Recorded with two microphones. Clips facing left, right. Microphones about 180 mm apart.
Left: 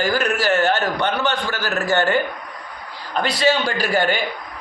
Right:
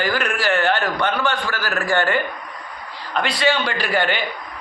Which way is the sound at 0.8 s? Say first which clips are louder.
Even; 20° left (ahead or behind).